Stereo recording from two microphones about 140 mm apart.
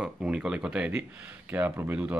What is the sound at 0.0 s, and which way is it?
Speech, 5° right (ahead or behind).